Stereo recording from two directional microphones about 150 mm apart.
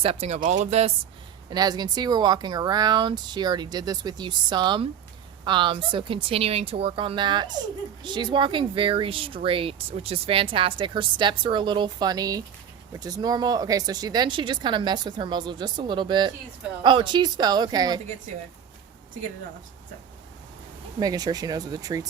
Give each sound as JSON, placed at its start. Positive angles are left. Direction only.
{"t": 0.0, "sound": "speech", "side_deg": -40}
{"t": 1.5, "sound": "speech", "side_deg": -25}
{"t": 21.0, "sound": "speech", "side_deg": -25}